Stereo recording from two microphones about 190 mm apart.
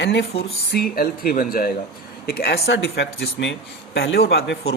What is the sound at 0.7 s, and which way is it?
Speech, 55° left (ahead or behind).